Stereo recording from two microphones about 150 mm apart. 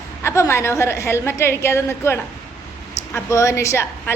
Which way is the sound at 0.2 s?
20° left (ahead or behind).